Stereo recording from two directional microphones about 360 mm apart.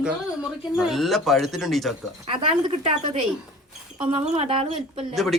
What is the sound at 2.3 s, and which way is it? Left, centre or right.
A woman's voice, centre.